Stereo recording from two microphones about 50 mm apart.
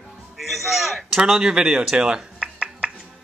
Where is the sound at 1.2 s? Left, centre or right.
Centre.